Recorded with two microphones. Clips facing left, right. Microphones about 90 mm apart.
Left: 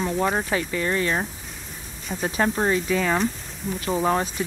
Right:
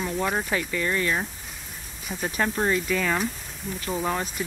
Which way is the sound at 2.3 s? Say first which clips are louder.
Left 2 dB; 25° left (ahead or behind).